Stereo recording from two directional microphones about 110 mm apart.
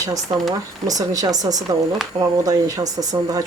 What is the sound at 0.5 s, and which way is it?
Speech, 35° right (ahead or behind).